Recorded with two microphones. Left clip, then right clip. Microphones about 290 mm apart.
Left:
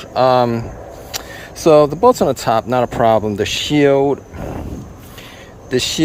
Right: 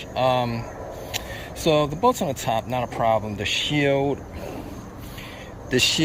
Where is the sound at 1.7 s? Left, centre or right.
Centre.